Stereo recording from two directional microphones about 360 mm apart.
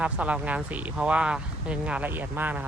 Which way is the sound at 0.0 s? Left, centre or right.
Centre.